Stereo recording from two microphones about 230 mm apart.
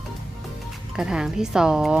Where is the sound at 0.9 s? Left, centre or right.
Centre.